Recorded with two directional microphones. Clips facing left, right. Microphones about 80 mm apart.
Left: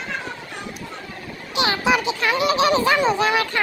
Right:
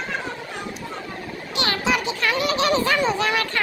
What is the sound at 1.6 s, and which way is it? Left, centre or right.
Speech, centre.